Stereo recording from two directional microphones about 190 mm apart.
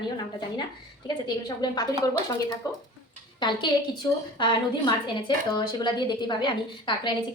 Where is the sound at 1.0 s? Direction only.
20° left (ahead or behind).